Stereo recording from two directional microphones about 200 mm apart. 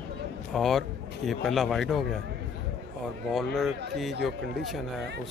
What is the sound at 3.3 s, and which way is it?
Speech, centre (ahead or behind).